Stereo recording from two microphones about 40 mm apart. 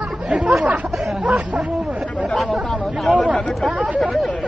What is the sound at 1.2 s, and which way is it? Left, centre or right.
Speech, right.